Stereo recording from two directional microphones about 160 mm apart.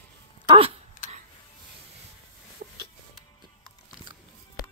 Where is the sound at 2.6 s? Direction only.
80° right.